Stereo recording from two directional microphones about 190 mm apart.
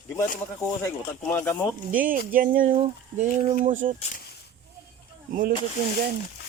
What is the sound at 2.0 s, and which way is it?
Speech, 50° right (ahead or behind).